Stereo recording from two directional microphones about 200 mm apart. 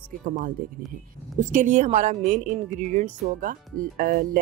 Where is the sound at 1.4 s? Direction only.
40° right (ahead or behind).